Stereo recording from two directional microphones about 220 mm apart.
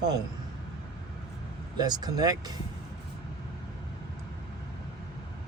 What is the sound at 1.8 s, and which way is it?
Speech, 20° right (ahead or behind).